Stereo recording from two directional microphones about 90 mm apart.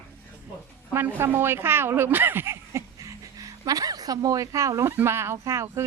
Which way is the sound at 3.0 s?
40° right (ahead or behind).